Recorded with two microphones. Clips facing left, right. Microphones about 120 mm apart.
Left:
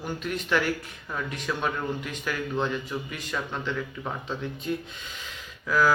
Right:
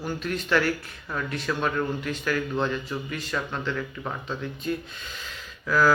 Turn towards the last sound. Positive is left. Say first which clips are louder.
# right 2 dB
turn(degrees=10)  # may be behind; listen again after turning